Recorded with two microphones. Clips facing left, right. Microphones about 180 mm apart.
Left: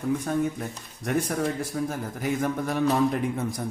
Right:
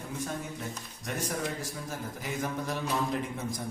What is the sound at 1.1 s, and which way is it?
A man's voice, 55° left (ahead or behind).